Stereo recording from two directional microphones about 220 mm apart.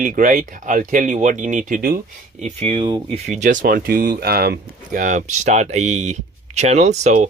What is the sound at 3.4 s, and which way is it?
Speech, 35° right (ahead or behind).